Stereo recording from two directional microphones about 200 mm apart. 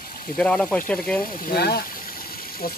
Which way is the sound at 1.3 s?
45° left (ahead or behind).